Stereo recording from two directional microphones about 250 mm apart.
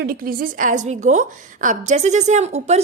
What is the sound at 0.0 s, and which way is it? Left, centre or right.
A woman's voice, right.